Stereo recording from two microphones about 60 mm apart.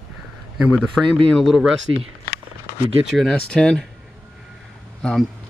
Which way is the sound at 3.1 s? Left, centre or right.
Centre.